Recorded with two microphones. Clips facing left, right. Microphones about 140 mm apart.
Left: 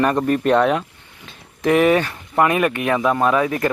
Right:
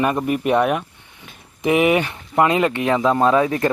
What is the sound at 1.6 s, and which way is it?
Speech, 15° right (ahead or behind).